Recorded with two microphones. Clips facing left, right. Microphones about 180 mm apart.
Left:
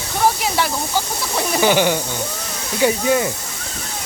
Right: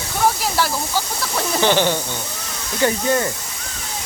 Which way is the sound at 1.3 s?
10° left (ahead or behind).